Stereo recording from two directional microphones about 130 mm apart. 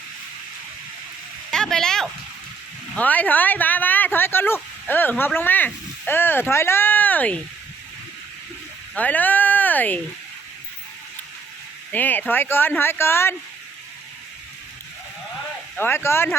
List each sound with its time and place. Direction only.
1.5 s a sound: 5° left (ahead or behind)
2.9 s speech: 10° left (ahead or behind)
9.0 s speech: 15° left (ahead or behind)
11.9 s speech: 15° left (ahead or behind)
15.8 s speech: 20° left (ahead or behind)